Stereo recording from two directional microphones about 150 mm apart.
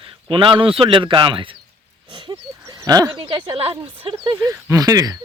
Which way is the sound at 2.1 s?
25° right (ahead or behind).